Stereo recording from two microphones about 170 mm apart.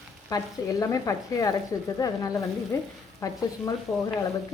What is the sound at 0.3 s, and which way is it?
Speech, 20° left (ahead or behind).